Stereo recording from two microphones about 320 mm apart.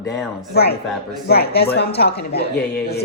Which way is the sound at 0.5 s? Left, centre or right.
Left.